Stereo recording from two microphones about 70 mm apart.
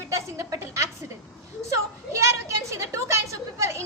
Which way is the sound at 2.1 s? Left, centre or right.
Right.